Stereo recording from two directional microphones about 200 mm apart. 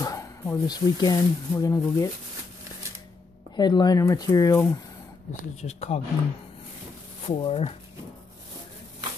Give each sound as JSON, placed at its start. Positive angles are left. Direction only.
{"t": 0.0, "sound": "speech", "side_deg": 15}
{"t": 3.5, "sound": "speech", "side_deg": 20}
{"t": 5.6, "sound": "speech", "side_deg": 35}
{"t": 7.2, "sound": "speech", "side_deg": 30}